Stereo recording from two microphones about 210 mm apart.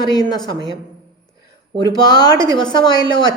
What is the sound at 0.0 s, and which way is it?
Speech, 20° left (ahead or behind).